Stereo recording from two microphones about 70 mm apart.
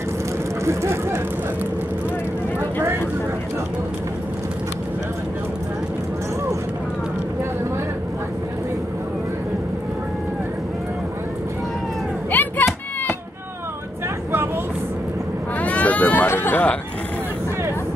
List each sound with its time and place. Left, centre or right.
0.7 s speech: right
12.3 s a sound: left
15.6 s hubbub: left